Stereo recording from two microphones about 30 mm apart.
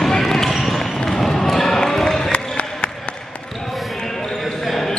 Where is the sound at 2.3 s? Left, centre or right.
Left.